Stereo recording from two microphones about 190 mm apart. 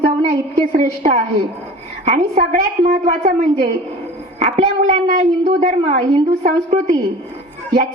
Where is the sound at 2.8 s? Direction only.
50° right (ahead or behind).